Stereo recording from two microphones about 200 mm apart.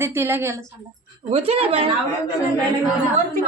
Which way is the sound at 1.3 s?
30° right (ahead or behind).